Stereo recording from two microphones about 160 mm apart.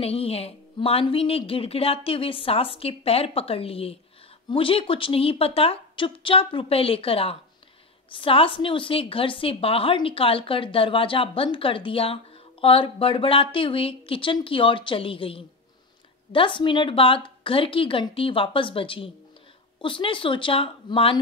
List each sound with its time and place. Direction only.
0.0 s a woman's voice: 40° left (ahead or behind)